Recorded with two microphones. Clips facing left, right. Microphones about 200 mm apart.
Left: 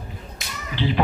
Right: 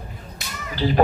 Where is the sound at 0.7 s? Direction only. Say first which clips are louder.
Right 2 dB; 40° right (ahead or behind).